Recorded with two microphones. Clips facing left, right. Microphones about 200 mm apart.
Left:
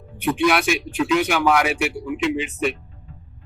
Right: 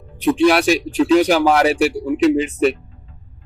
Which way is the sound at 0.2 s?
30° right (ahead or behind).